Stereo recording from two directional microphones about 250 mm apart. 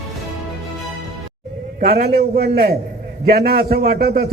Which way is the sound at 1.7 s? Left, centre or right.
Right.